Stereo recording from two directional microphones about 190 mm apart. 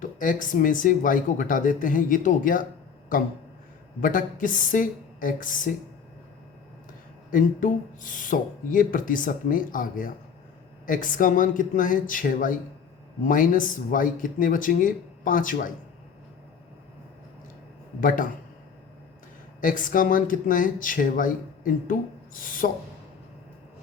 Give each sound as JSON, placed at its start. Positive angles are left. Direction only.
{"t": 0.0, "sound": "speech", "side_deg": 45}
{"t": 4.0, "sound": "speech", "side_deg": 45}
{"t": 7.3, "sound": "speech", "side_deg": 45}
{"t": 19.6, "sound": "speech", "side_deg": 45}